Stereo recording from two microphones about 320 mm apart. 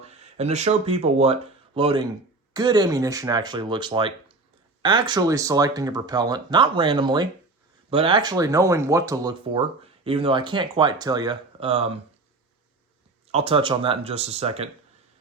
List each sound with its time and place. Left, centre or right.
0.0 s speech: centre
13.3 s speech: centre